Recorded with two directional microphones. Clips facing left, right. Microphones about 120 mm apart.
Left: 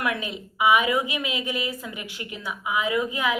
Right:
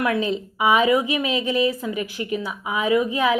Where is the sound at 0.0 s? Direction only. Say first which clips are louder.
Right 6 dB; 30° right (ahead or behind).